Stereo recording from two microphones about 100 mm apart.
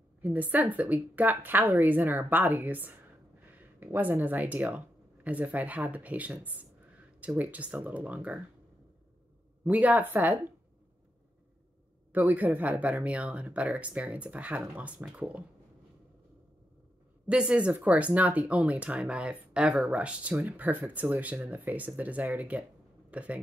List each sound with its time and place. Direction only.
0.2 s speech: 15° right (ahead or behind)
9.7 s speech: 15° right (ahead or behind)
12.1 s speech: 15° right (ahead or behind)
17.3 s speech: 10° right (ahead or behind)